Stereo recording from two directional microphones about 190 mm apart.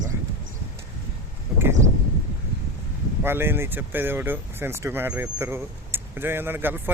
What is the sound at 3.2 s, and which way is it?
Speech, 10° right (ahead or behind).